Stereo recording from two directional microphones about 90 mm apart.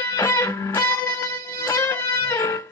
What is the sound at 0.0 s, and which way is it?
Music, 25° left (ahead or behind).